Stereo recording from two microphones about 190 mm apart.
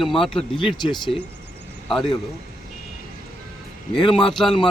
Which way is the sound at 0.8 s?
25° left (ahead or behind).